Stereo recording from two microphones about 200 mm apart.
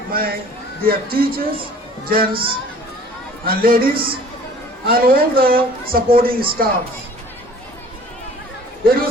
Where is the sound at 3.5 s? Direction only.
45° right (ahead or behind).